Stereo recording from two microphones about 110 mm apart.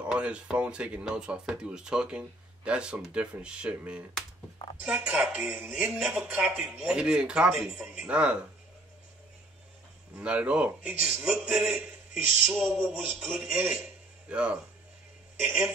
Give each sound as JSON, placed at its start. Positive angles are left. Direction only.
{"t": 0.0, "sound": "speech", "side_deg": -10}
{"t": 10.1, "sound": "speech", "side_deg": -10}